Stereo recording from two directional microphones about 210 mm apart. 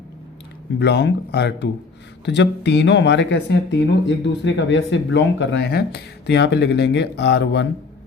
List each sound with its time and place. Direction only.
0.8 s speech: 55° left (ahead or behind)